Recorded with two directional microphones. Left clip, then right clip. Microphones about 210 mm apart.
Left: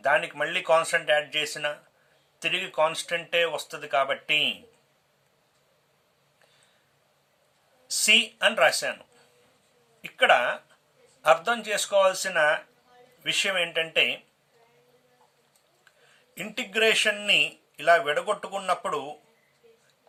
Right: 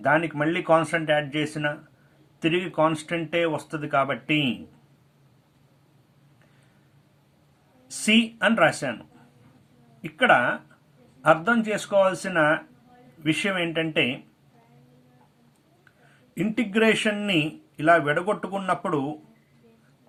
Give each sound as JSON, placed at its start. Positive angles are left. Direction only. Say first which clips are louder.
{"t": 0.0, "sound": "speech", "louder": "right 2 dB", "side_deg": 20}
{"t": 7.9, "sound": "speech", "louder": "left 2 dB", "side_deg": 20}
{"t": 10.0, "sound": "speech", "louder": "right 1 dB", "side_deg": 15}
{"t": 16.3, "sound": "speech", "louder": "right 4 dB", "side_deg": 20}